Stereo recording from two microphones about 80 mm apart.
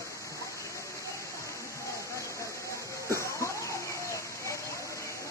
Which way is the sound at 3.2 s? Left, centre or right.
Left.